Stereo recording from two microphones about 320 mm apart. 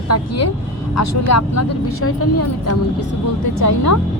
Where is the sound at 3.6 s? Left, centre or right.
Left.